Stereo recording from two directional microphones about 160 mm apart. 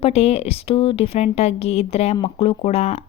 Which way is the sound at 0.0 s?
40° left (ahead or behind).